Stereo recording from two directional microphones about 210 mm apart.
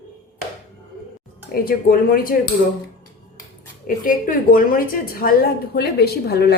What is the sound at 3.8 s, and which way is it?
A woman's voice, 40° left (ahead or behind).